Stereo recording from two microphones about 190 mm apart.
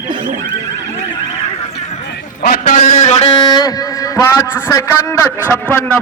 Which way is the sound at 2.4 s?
45° left (ahead or behind).